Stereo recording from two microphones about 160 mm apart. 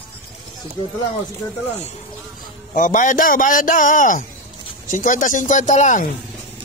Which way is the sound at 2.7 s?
55° left (ahead or behind).